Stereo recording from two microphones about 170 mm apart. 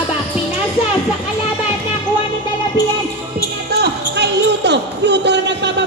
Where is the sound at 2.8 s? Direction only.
25° left (ahead or behind).